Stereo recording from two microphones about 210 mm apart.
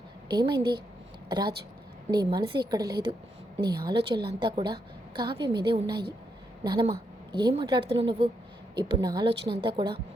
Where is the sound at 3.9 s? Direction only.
50° right (ahead or behind).